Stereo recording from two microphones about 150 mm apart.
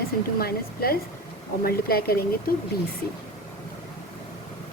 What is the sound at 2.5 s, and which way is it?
Speech, 75° left (ahead or behind).